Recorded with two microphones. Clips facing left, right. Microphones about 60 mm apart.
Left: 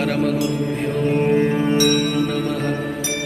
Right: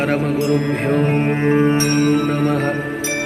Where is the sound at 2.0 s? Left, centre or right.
Right.